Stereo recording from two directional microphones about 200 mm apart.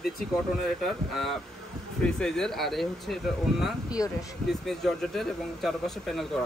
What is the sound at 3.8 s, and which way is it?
Speech, 15° left (ahead or behind).